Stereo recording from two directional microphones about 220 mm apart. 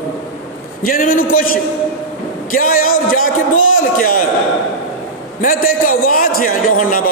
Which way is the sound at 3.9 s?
40° left (ahead or behind).